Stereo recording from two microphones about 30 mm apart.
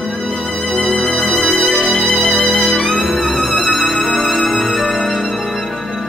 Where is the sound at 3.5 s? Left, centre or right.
Centre.